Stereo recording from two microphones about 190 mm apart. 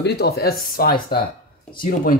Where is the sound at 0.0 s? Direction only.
60° left (ahead or behind).